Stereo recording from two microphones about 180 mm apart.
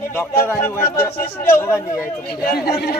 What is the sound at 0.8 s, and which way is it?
Speech, 55° left (ahead or behind).